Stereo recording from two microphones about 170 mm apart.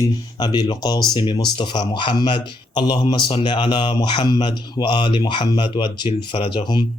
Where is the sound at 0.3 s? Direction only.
25° left (ahead or behind).